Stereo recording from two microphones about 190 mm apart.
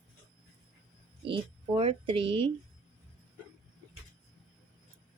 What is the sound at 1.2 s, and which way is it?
A woman's voice, 30° right (ahead or behind).